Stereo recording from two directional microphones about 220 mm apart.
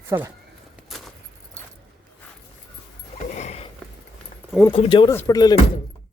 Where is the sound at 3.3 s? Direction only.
30° left (ahead or behind).